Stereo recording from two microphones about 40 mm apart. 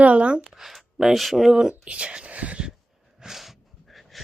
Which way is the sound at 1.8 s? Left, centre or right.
Right.